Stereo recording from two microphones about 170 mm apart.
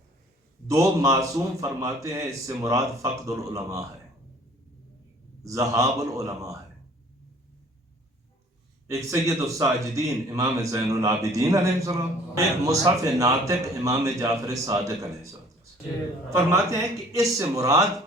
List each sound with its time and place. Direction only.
0.7 s a man's voice: 20° right (ahead or behind)
5.4 s a man's voice: 20° right (ahead or behind)
8.9 s a man's voice: 20° right (ahead or behind)